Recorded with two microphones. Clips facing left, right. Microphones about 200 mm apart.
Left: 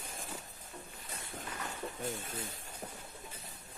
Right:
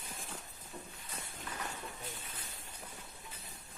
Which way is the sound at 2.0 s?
45° left (ahead or behind).